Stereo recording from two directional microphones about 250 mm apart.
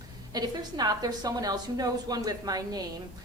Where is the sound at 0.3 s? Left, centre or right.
Centre.